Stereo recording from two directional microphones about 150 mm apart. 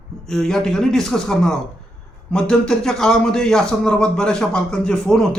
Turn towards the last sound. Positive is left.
turn(degrees=5)  # may be behind; listen again after turning